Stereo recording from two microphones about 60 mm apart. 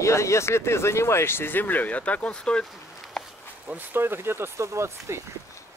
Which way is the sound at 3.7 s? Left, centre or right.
Right.